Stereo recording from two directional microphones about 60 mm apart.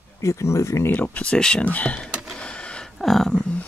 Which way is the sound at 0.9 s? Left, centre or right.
Left.